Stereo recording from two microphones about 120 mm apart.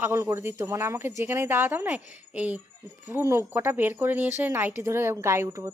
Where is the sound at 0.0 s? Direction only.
20° right (ahead or behind).